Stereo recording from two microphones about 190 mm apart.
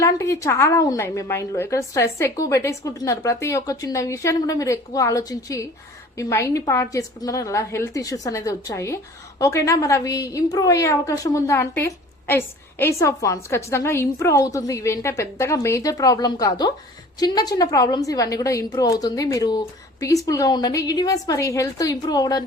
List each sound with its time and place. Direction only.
0.0 s a woman's voice: 15° left (ahead or behind)